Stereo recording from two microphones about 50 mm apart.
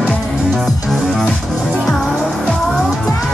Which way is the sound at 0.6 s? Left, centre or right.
Centre.